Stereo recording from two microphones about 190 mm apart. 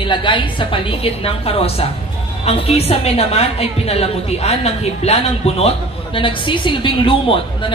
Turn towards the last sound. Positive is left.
turn(degrees=25)  # may be behind; listen again after turning